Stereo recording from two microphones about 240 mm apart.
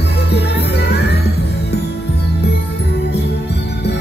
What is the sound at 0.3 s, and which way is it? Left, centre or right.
Music, left.